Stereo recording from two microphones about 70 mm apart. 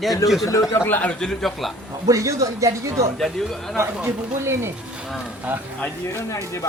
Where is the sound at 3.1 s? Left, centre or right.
Centre.